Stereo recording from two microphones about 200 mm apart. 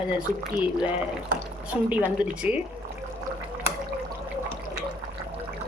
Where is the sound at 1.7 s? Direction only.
10° right (ahead or behind).